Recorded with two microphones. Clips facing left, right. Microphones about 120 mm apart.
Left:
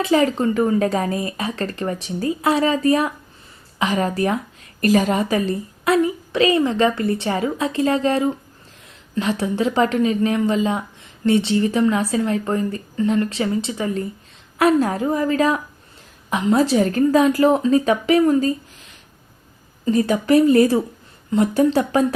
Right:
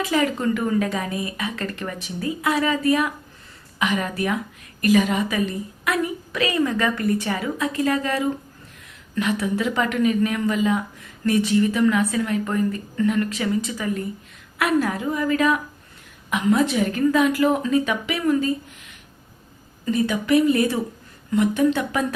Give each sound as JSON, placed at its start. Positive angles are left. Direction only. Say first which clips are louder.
{"t": 0.0, "sound": "speech", "louder": "left 4 dB", "side_deg": 30}